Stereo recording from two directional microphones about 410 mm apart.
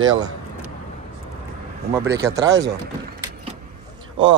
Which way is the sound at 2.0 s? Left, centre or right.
Centre.